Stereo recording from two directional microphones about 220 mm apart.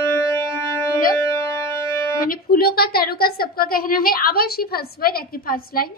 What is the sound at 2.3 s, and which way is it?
A woman's voice, 40° left (ahead or behind).